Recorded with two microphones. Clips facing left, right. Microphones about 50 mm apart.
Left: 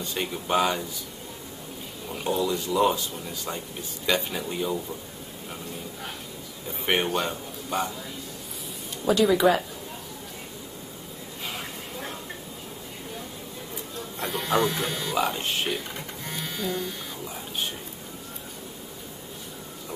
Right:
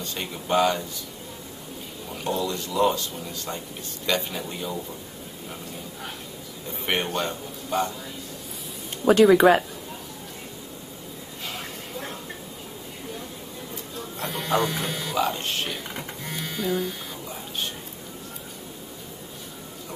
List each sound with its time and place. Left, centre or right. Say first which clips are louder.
0.0 s speech: left 2 dB; centre
2.0 s a man's voice: left 1 dB; centre
6.9 s a man's voice: left 1 dB; centre
9.0 s speech: right 5 dB; right
11.5 s a sound: right 1 dB; centre
13.9 s speech: even; centre